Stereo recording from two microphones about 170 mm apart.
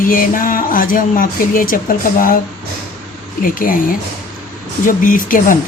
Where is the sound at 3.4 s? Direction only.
55° left (ahead or behind).